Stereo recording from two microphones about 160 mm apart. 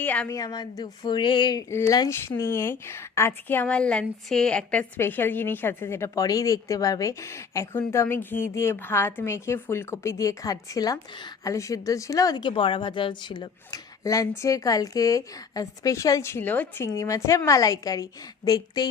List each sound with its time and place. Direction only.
0.0 s a woman's voice: 10° left (ahead or behind)
0.3 s a woman's voice: 25° left (ahead or behind)